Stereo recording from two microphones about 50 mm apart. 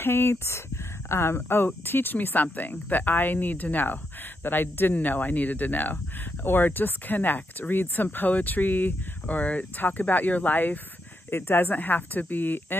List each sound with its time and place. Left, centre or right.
0.0 s speech: left